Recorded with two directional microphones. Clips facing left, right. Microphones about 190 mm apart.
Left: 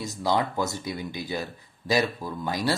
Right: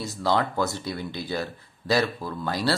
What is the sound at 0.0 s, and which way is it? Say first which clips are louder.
Speech: right 1 dB; 15° left (ahead or behind).